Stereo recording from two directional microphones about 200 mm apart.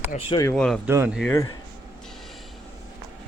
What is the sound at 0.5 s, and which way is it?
Speech, 5° left (ahead or behind).